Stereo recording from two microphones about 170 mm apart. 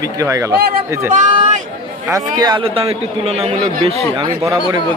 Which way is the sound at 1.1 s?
45° right (ahead or behind).